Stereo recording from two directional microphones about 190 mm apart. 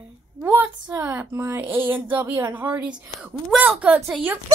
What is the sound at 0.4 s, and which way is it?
A woman's voice, 10° right (ahead or behind).